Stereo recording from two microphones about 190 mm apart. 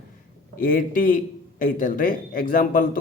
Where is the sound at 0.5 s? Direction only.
45° left (ahead or behind).